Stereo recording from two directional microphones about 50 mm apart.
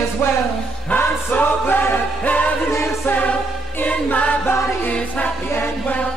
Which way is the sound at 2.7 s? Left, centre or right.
Left.